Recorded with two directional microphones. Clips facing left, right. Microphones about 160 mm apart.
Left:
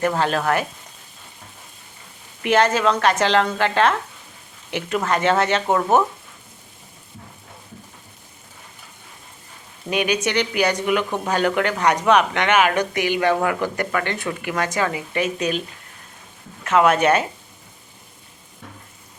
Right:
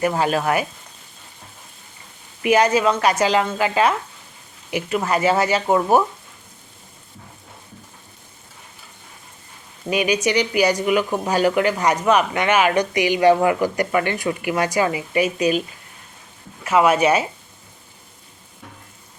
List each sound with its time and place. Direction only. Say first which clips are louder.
0.0 s speech: right 1 dB; 10° right (ahead or behind)
2.4 s speech: right 1 dB; 10° right (ahead or behind)
10.2 s speech: right 2 dB; 10° right (ahead or behind)
12.9 s a woman's voice: right 2 dB; 55° left (ahead or behind)
13.1 s speech: right 5 dB; 10° right (ahead or behind)
16.6 s speech: even; 10° right (ahead or behind)